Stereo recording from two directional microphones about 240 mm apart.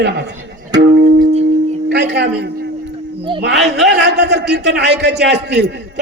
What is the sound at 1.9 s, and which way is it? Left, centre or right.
A man's voice, right.